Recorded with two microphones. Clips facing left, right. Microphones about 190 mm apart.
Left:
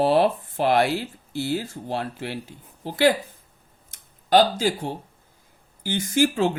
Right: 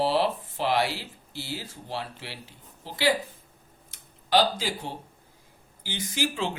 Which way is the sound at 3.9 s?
50° left (ahead or behind).